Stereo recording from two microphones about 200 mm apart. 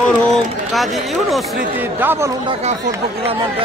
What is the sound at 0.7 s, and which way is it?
Speech, centre (ahead or behind).